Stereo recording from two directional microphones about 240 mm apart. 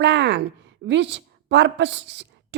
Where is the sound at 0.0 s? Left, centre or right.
Right.